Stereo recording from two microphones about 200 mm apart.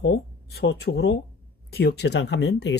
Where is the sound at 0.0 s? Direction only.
55° left (ahead or behind).